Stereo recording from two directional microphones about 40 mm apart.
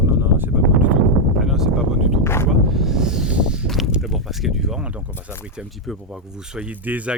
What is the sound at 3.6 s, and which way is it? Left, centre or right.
Speech, centre.